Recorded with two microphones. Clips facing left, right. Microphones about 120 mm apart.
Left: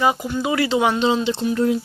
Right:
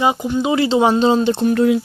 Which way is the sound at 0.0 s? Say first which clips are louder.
Right 3 dB; 20° right (ahead or behind).